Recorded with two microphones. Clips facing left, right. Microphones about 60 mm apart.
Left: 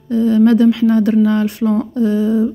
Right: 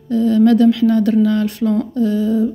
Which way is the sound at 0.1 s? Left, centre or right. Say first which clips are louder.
Left 1 dB; left.